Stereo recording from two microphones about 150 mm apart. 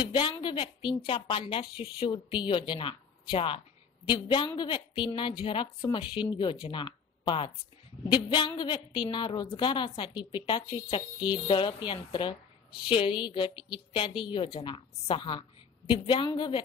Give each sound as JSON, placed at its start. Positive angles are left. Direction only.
{"t": 0.0, "sound": "a woman's voice", "side_deg": 35}